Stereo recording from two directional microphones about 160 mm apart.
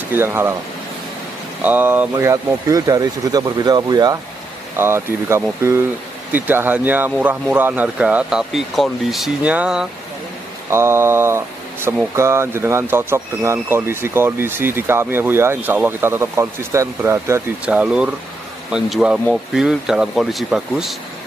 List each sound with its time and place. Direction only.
0.1 s speech: 15° right (ahead or behind)
1.6 s speech: 10° right (ahead or behind)